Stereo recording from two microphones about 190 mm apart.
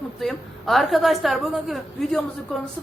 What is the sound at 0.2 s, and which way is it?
A woman's voice, centre (ahead or behind).